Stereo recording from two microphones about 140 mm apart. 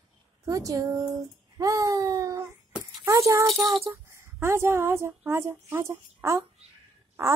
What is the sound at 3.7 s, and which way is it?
A woman's voice, 20° right (ahead or behind).